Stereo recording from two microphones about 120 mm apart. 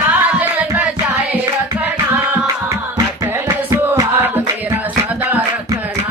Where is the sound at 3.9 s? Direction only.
20° right (ahead or behind).